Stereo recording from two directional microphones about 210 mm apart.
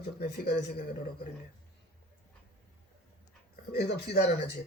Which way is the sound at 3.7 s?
50° left (ahead or behind).